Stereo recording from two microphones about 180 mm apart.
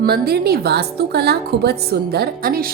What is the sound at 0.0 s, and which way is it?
A woman's voice, 60° right (ahead or behind).